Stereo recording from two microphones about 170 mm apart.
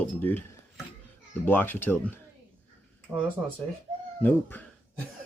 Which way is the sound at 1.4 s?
10° left (ahead or behind).